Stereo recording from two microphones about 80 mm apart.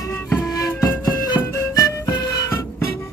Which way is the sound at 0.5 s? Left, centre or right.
Left.